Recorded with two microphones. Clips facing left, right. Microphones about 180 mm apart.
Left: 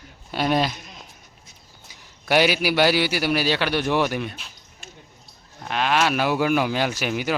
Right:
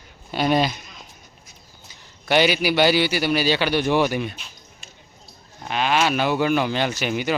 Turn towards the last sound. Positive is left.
turn(degrees=0)  # may be behind; listen again after turning